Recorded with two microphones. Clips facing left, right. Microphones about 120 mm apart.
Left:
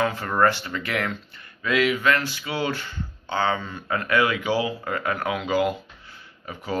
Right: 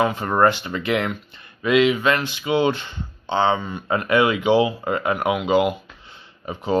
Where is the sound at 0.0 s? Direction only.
20° right (ahead or behind).